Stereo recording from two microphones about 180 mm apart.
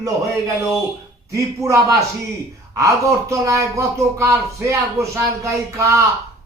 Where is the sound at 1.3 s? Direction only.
15° right (ahead or behind).